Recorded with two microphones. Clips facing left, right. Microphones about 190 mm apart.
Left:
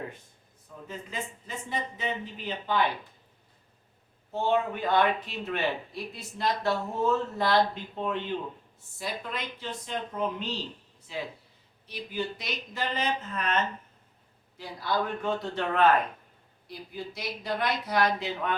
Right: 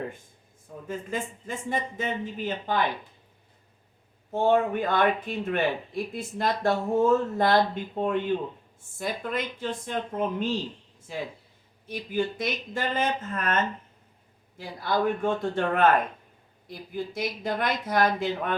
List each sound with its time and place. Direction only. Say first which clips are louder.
0.9 s speech: right 6 dB; 50° right (ahead or behind)
4.3 s speech: right 5 dB; 50° right (ahead or behind)